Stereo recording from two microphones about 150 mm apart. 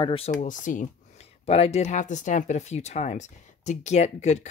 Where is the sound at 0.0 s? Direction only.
40° left (ahead or behind).